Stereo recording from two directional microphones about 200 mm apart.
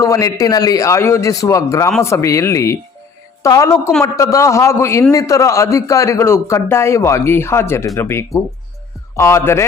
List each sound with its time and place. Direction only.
0.0 s a man's voice: 15° left (ahead or behind)